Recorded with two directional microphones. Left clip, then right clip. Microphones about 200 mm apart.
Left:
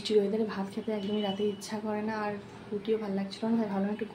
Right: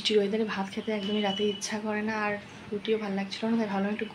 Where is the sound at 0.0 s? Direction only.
5° left (ahead or behind).